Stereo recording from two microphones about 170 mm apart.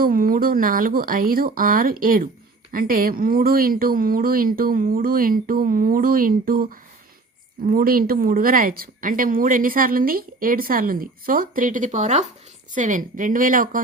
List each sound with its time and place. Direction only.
0.0 s speech: 55° right (ahead or behind)